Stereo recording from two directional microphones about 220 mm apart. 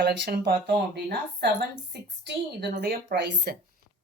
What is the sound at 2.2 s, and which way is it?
Speech, 50° right (ahead or behind).